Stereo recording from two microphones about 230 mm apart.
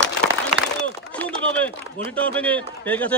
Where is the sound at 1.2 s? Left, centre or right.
Centre.